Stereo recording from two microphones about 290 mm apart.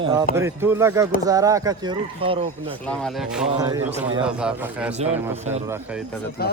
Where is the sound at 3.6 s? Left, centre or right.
Centre.